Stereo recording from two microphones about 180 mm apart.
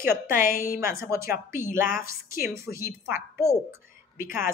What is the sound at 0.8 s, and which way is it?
Speech, 15° right (ahead or behind).